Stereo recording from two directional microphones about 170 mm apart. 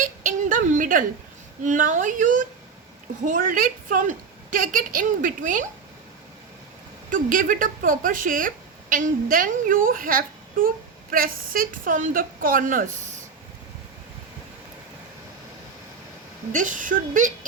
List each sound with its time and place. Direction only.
0.0 s a sound: 50° right (ahead or behind)
1.6 s speech: 45° right (ahead or behind)
7.1 s speech: 50° right (ahead or behind)
16.5 s speech: 50° right (ahead or behind)